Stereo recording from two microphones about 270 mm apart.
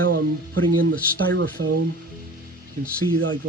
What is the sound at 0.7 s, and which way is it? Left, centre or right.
Speech, right.